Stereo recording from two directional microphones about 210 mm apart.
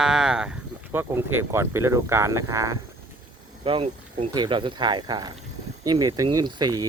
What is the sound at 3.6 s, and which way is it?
Speech, 25° right (ahead or behind).